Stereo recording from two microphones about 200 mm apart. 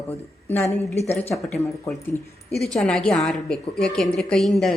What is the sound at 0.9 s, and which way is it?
Speech, 30° left (ahead or behind).